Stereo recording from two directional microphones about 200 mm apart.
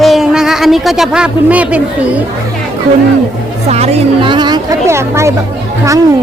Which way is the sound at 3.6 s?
30° right (ahead or behind).